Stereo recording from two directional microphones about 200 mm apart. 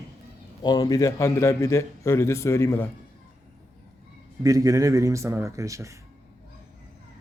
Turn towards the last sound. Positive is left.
turn(degrees=-15)  # may be behind; listen again after turning